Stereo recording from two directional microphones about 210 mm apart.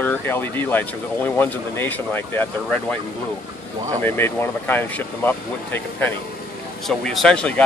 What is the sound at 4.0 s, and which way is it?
Speech, 10° left (ahead or behind).